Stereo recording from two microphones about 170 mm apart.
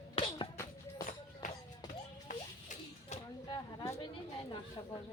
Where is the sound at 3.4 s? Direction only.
25° left (ahead or behind).